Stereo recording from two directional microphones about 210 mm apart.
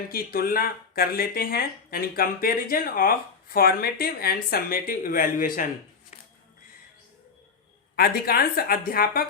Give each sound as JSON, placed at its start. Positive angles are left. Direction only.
{"t": 0.1, "sound": "speech", "side_deg": 45}
{"t": 7.9, "sound": "speech", "side_deg": 45}